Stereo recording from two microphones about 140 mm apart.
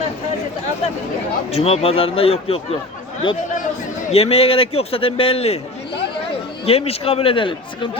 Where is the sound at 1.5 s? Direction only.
45° left (ahead or behind).